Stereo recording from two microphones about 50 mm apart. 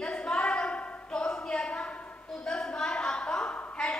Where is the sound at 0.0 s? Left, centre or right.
Centre.